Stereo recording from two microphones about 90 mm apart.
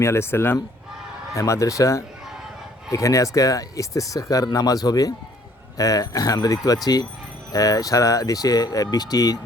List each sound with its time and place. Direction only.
0.0 s speech: 30° left (ahead or behind)
1.4 s speech: 35° left (ahead or behind)